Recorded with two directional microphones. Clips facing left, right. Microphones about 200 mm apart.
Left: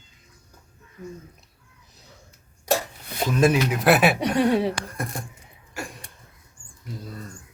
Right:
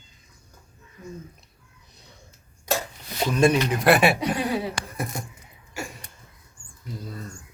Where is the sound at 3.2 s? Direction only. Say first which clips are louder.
Even; 5° left (ahead or behind).